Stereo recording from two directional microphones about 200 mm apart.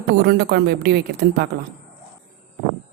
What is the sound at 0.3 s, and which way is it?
Speech, 50° right (ahead or behind).